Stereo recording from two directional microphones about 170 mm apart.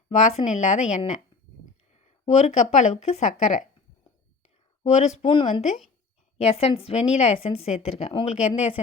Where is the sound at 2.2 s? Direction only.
45° left (ahead or behind).